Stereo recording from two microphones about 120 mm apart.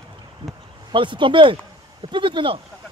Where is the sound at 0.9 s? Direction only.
45° right (ahead or behind).